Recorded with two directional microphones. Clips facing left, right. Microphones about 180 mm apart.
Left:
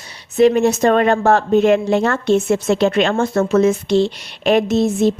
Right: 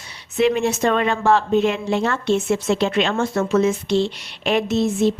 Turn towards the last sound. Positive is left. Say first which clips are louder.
# left 3 dB
turn(degrees=40)  # may be behind; listen again after turning